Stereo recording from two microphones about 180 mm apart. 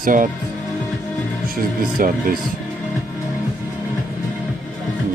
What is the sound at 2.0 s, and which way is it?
Speech, 50° right (ahead or behind).